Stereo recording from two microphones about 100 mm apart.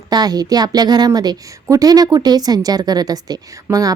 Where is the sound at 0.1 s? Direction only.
40° right (ahead or behind).